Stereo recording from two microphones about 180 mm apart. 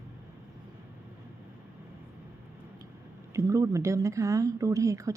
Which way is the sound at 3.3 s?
15° right (ahead or behind).